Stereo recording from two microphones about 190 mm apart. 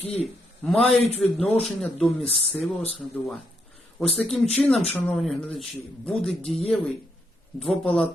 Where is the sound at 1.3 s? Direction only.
5° left (ahead or behind).